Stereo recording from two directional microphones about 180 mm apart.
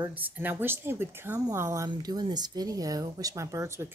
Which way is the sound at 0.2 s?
10° right (ahead or behind).